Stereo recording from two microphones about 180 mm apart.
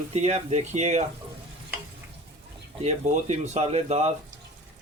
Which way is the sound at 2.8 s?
40° right (ahead or behind).